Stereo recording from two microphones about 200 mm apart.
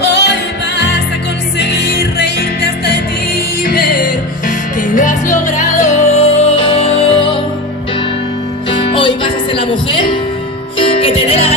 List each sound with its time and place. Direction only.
0.0 s music: 60° left (ahead or behind); by 7.4 s 25° left (ahead or behind)
8.9 s music: 25° left (ahead or behind)